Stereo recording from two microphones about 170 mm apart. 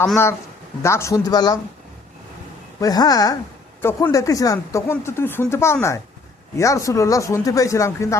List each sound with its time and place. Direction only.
0.8 s speech: 15° left (ahead or behind)
2.8 s speech: 20° left (ahead or behind)